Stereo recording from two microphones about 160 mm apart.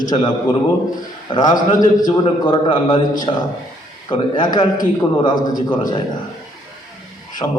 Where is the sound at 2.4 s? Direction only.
30° left (ahead or behind).